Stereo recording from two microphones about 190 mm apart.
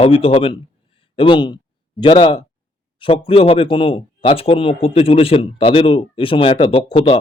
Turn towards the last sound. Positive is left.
turn(degrees=30)  # may be behind; listen again after turning